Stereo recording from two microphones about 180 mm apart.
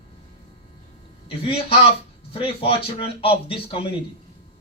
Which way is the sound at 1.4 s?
30° left (ahead or behind).